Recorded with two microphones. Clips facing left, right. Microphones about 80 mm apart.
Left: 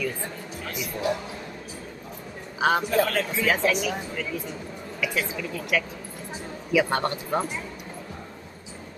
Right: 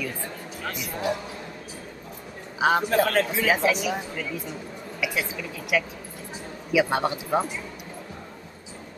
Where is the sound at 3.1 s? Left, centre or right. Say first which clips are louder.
Right 3 dB; right.